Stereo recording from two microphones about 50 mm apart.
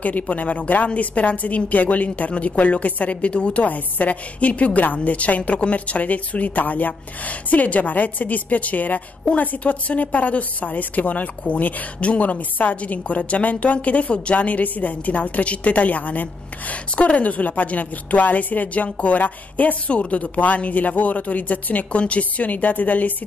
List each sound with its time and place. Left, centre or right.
0.0 s a woman's voice: left